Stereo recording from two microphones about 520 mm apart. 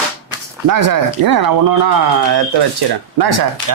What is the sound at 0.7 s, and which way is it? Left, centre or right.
Speech, right.